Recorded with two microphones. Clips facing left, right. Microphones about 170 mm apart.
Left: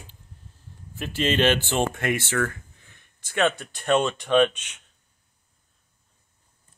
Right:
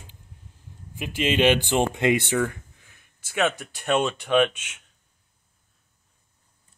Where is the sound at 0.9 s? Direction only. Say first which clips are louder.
Even; 10° right (ahead or behind).